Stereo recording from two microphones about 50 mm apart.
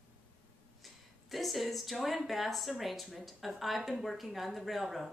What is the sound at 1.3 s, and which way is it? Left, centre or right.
Speech, centre.